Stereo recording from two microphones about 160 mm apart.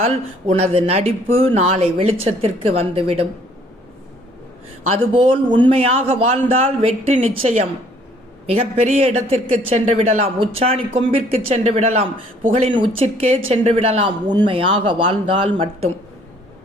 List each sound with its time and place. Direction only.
0.0 s a man's voice: 40° right (ahead or behind)
4.9 s a man's voice: 30° right (ahead or behind)